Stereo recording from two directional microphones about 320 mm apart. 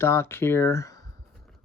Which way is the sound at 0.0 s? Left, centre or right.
Centre.